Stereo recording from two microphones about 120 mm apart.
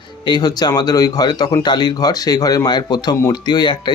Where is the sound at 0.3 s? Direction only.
35° left (ahead or behind).